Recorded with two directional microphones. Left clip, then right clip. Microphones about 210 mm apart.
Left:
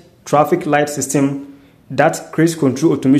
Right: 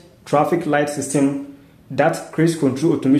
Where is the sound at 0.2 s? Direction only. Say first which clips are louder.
Left 4 dB; 25° left (ahead or behind).